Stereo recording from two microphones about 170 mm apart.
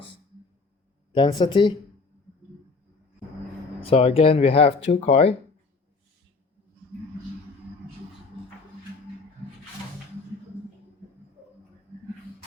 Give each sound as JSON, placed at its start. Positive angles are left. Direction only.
{"t": 1.1, "sound": "a woman's voice", "side_deg": 30}
{"t": 3.8, "sound": "speech", "side_deg": 35}